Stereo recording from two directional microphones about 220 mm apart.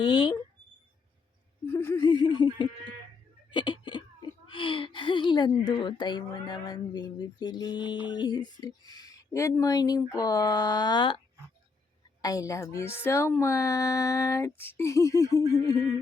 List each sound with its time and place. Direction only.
0.0 s speech: 20° left (ahead or behind)
1.6 s a sound: 10° left (ahead or behind)
4.4 s a woman's voice: 20° left (ahead or behind)
12.2 s speech: 15° left (ahead or behind)